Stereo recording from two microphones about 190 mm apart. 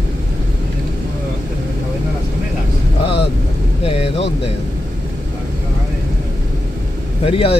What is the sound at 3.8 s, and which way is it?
Vehicle, 30° left (ahead or behind).